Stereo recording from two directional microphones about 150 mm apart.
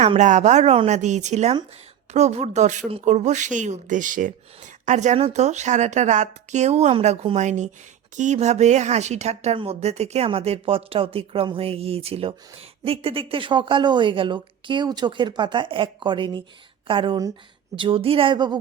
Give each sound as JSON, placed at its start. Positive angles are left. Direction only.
{"t": 0.0, "sound": "speech", "side_deg": -50}